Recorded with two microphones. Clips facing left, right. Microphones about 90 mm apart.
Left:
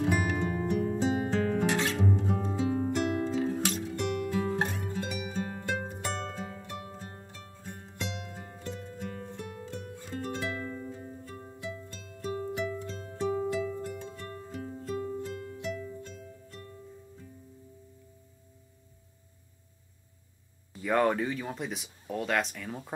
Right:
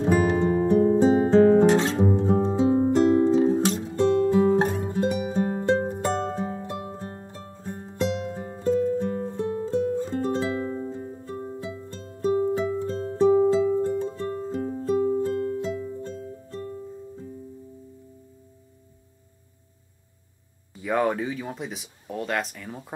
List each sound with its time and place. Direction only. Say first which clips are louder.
0.0 s guitar: right 8 dB; 25° right (ahead or behind)
6.3 s music: right 9 dB; 25° right (ahead or behind)
15.6 s music: right 7 dB; 25° right (ahead or behind)
20.7 s a sound: right 2 dB; 5° right (ahead or behind)